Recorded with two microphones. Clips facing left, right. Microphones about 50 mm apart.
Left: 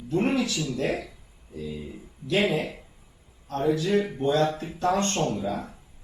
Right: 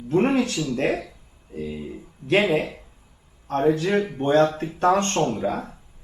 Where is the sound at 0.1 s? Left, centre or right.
Right.